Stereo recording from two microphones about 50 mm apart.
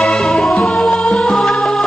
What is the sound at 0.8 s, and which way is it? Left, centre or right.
Music, centre.